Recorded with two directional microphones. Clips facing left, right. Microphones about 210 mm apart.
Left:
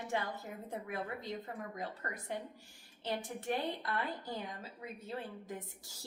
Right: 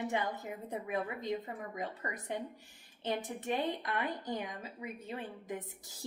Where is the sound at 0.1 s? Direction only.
20° right (ahead or behind).